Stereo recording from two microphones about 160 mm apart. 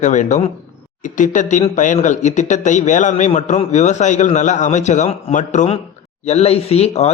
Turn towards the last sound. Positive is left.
turn(degrees=40)  # may be behind; listen again after turning